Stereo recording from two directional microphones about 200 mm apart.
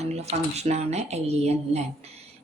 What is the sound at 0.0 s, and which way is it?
Speech, 30° right (ahead or behind).